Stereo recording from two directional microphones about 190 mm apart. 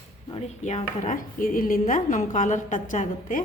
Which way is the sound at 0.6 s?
40° left (ahead or behind).